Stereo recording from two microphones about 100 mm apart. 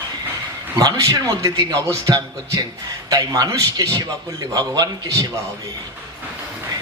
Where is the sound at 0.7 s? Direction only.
40° right (ahead or behind).